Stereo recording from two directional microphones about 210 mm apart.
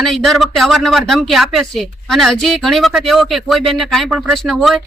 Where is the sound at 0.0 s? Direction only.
Centre (ahead or behind).